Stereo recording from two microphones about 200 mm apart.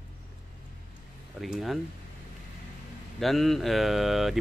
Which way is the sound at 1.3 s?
Centre (ahead or behind).